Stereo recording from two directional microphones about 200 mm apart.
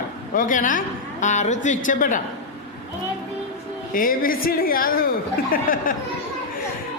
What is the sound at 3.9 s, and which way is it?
A man's voice, 45° left (ahead or behind).